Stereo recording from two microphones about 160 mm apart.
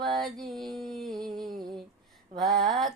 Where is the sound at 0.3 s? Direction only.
Centre (ahead or behind).